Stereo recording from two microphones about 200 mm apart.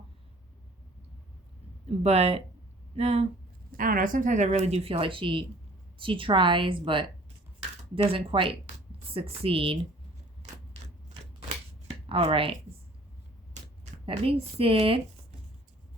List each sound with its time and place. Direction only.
1.9 s speech: 30° right (ahead or behind)
3.7 s a woman's voice: 45° right (ahead or behind); by 9.7 s 25° right (ahead or behind)
12.0 s a woman's voice: 25° right (ahead or behind)
14.0 s a woman's voice: 30° right (ahead or behind)